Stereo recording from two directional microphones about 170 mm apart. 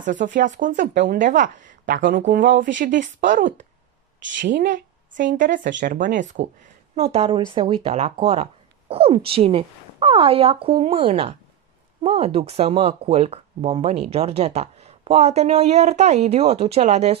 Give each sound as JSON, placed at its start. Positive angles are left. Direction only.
{"t": 0.0, "sound": "a woman's voice", "side_deg": -50}
{"t": 4.4, "sound": "speech", "side_deg": -90}
{"t": 5.8, "sound": "a woman's voice", "side_deg": -50}
{"t": 7.0, "sound": "speech", "side_deg": -35}